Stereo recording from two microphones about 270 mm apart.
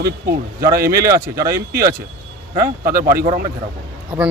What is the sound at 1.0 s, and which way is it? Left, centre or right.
Speech, centre.